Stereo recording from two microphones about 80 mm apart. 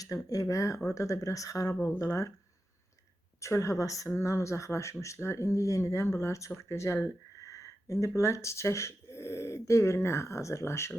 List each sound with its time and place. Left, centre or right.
0.0 s speech: left
3.4 s speech: left